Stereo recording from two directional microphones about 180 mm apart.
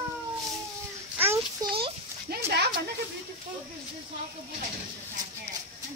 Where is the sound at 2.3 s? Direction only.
55° right (ahead or behind).